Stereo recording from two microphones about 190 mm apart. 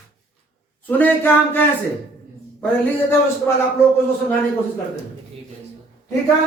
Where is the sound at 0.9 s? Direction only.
10° left (ahead or behind).